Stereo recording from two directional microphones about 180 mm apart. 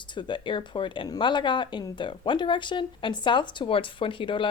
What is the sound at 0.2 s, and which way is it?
Speech, 25° left (ahead or behind).